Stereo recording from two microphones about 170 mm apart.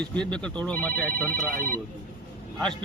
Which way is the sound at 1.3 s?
55° right (ahead or behind).